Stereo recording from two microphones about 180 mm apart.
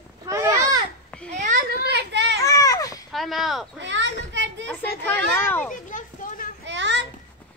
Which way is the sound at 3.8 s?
85° right.